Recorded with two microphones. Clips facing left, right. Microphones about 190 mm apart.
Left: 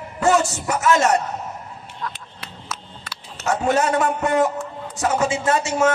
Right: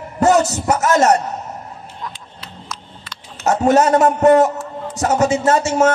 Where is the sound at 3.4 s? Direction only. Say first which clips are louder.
Right 6 dB; 40° right (ahead or behind).